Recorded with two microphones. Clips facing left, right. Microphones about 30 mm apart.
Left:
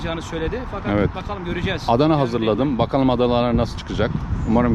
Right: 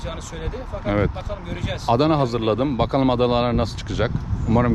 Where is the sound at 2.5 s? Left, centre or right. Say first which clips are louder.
Left 1 dB; right.